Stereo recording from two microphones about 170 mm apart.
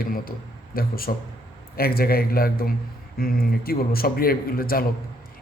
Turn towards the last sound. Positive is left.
turn(degrees=60)  # may be behind; listen again after turning